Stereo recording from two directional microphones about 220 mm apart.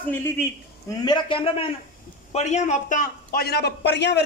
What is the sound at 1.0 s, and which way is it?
A man's voice, 20° left (ahead or behind).